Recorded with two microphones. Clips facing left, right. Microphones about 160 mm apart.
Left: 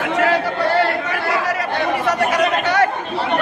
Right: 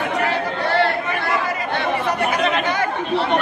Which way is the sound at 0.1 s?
90° left.